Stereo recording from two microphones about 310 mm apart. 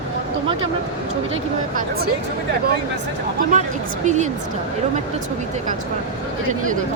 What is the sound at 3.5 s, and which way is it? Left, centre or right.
Speech, right.